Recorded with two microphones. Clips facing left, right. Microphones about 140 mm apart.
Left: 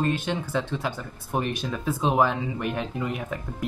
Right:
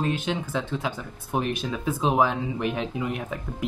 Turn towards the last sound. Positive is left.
turn(degrees=0)  # may be behind; listen again after turning